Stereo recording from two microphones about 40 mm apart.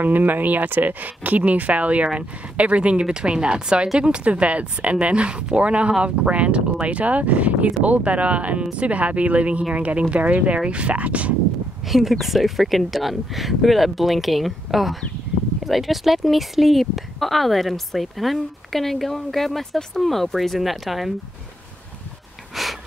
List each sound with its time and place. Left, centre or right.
0.0 s a woman's voice: right
11.9 s speech: centre
22.5 s a sound: centre